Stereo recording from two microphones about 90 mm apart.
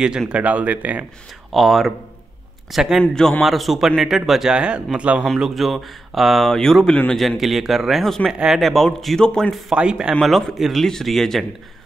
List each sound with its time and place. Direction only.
0.3 s speech: 15° right (ahead or behind)
1.5 s speech: centre (ahead or behind)
3.0 s a man's voice: 5° left (ahead or behind); by 5.2 s 15° right (ahead or behind)
5.2 s speech: centre (ahead or behind)
9.8 s speech: 10° right (ahead or behind)
10.2 s speech: centre (ahead or behind)